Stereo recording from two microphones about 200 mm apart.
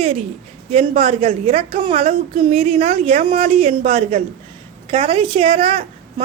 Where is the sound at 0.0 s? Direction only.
30° right (ahead or behind).